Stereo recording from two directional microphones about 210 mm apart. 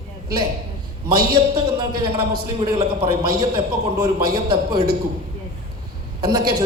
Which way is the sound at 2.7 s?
20° right (ahead or behind).